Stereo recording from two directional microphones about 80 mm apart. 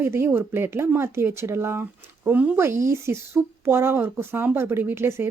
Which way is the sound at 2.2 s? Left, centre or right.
Centre.